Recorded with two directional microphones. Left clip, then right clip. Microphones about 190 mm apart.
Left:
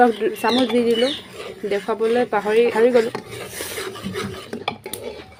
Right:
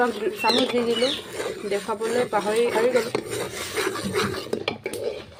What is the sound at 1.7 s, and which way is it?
Speech, 35° left (ahead or behind).